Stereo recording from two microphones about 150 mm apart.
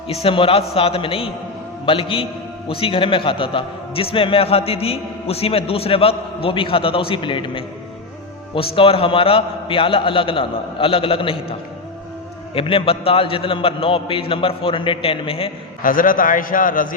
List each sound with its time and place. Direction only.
0.1 s a man's voice: 40° left (ahead or behind)
12.5 s a man's voice: 40° left (ahead or behind)
15.8 s a man's voice: 70° left (ahead or behind)